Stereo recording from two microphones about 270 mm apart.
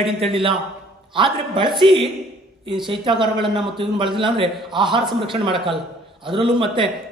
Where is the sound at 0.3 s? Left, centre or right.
Centre.